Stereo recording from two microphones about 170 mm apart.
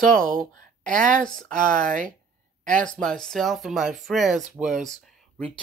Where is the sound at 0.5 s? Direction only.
50° right (ahead or behind).